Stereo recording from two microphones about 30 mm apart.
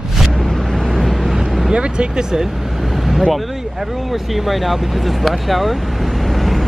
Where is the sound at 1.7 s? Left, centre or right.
Right.